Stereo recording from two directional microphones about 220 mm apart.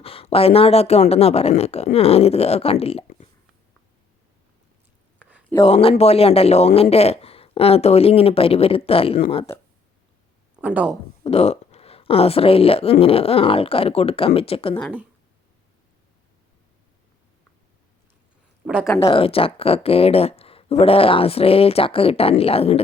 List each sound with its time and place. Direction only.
0.0 s speech: 25° left (ahead or behind)
5.6 s speech: 25° left (ahead or behind)
10.6 s speech: 5° right (ahead or behind)
11.2 s speech: 30° left (ahead or behind)
18.9 s speech: 25° left (ahead or behind)